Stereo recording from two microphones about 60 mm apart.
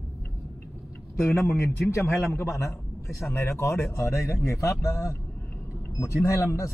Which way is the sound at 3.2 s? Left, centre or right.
Left.